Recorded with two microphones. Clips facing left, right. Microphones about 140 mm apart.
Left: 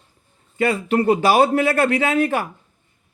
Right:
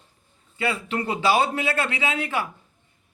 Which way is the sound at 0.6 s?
45° left (ahead or behind).